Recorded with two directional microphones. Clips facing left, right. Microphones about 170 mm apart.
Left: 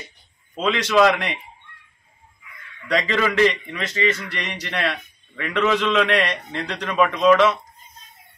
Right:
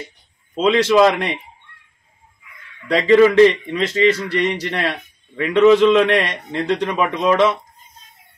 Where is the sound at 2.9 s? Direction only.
30° right (ahead or behind).